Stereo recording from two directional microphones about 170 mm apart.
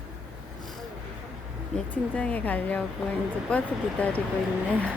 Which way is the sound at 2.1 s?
10° left (ahead or behind).